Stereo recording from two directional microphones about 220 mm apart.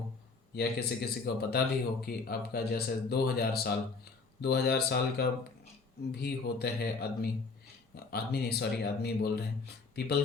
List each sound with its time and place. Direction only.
0.5 s speech: 45° left (ahead or behind)